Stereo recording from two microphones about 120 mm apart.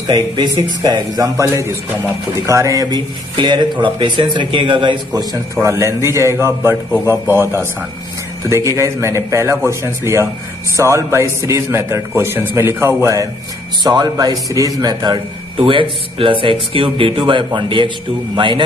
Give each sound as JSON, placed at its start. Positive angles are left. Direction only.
{"t": 0.1, "sound": "a man's voice", "side_deg": -35}